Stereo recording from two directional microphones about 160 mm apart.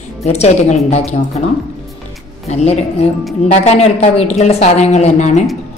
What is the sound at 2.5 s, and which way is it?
A woman's voice, 45° left (ahead or behind).